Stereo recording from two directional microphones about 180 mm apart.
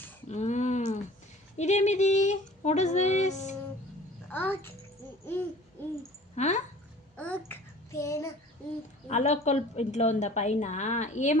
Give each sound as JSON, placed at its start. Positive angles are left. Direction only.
{"t": 0.3, "sound": "a sound", "side_deg": 40}
{"t": 1.5, "sound": "a woman's voice", "side_deg": 40}
{"t": 4.3, "sound": "a child's voice", "side_deg": 10}
{"t": 5.8, "sound": "owl", "side_deg": 10}
{"t": 6.3, "sound": "speech", "side_deg": 40}
{"t": 7.2, "sound": "child singing", "side_deg": 10}
{"t": 9.0, "sound": "a woman's voice", "side_deg": 40}